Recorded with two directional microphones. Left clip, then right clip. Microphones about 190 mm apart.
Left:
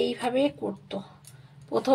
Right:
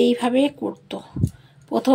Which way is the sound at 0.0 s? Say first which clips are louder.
Right 7 dB; 45° right (ahead or behind).